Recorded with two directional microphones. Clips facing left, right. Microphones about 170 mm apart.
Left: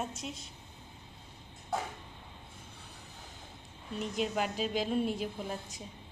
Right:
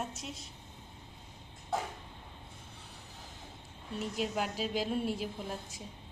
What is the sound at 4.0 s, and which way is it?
Speech, centre (ahead or behind).